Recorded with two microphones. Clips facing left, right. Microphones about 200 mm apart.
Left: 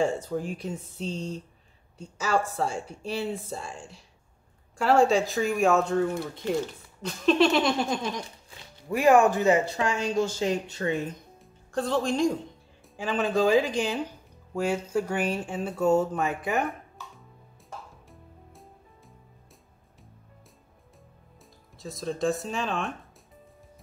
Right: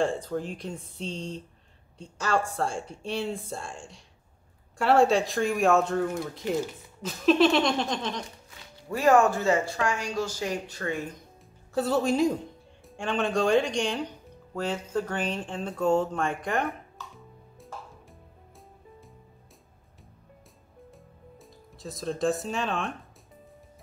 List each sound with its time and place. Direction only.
0.0 s speech: 5° left (ahead or behind)
11.7 s speech: 5° right (ahead or behind)
21.8 s speech: centre (ahead or behind)